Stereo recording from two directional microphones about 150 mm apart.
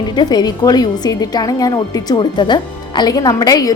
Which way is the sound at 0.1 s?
30° left (ahead or behind).